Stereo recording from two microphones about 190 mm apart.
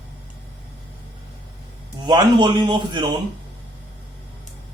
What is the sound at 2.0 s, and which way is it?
A man's voice, 25° right (ahead or behind).